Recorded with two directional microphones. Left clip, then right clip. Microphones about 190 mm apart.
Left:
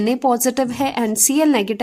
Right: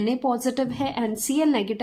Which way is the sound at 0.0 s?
35° left (ahead or behind).